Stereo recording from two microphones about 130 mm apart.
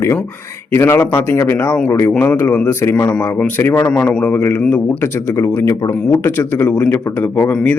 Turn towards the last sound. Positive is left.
turn(degrees=10)  # may be behind; listen again after turning